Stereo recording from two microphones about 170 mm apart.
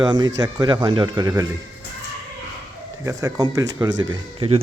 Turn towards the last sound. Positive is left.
turn(degrees=-25)  # may be behind; listen again after turning